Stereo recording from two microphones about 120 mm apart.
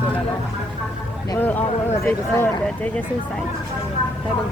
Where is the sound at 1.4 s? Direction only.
15° left (ahead or behind).